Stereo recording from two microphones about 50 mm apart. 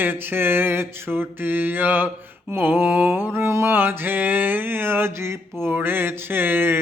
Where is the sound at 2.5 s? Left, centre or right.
Right.